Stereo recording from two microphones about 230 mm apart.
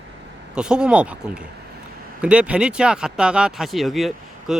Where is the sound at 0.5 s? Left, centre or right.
Centre.